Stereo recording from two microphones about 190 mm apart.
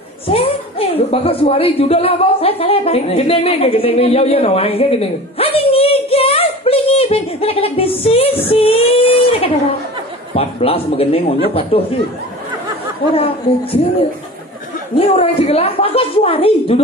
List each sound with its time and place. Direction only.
0.3 s a woman's voice: 30° left (ahead or behind)
8.5 s child singing: 30° left (ahead or behind)
10.3 s a woman's voice: 30° left (ahead or behind)
13.1 s a man's voice: 30° left (ahead or behind)